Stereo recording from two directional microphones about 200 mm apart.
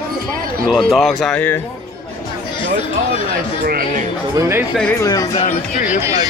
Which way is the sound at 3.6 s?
45° right (ahead or behind).